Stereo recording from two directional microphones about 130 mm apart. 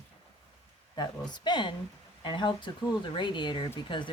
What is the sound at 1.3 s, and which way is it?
Speech, 35° left (ahead or behind).